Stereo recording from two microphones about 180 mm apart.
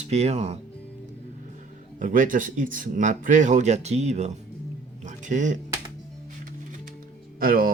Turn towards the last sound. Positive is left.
turn(degrees=-55)  # may be behind; listen again after turning